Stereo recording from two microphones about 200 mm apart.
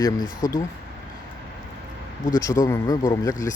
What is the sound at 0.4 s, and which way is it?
Speech, 20° left (ahead or behind).